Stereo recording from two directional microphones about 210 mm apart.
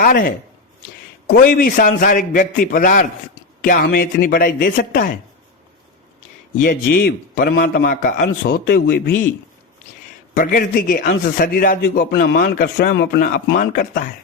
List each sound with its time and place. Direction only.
0.0 s a man's voice: 45° left (ahead or behind)
1.5 s a man's voice: 45° left (ahead or behind)
6.6 s a man's voice: 50° left (ahead or behind)
10.3 s a man's voice: 40° left (ahead or behind)
13.6 s a man's voice: 40° left (ahead or behind)